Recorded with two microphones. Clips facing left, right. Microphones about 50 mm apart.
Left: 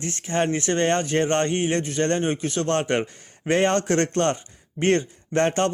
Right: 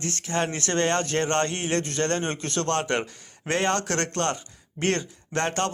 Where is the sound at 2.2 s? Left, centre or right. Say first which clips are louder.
Left 4 dB; centre.